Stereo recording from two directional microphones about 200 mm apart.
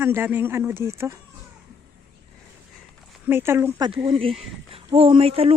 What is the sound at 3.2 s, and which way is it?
Speech, 10° right (ahead or behind).